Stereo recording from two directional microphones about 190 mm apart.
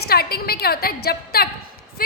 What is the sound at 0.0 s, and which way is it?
A woman's voice, 55° left (ahead or behind).